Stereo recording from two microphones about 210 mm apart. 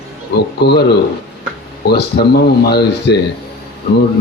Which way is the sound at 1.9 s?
50° left (ahead or behind).